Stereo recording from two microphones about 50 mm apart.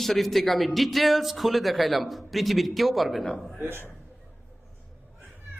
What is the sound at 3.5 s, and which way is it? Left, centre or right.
Speech, right.